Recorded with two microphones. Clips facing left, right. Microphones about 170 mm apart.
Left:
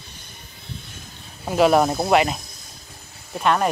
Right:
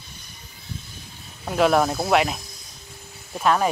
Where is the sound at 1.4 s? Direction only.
5° left (ahead or behind).